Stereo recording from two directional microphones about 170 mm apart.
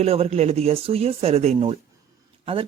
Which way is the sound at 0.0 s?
35° right (ahead or behind).